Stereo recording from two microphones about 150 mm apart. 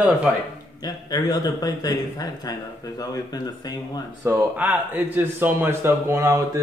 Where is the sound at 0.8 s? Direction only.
25° left (ahead or behind).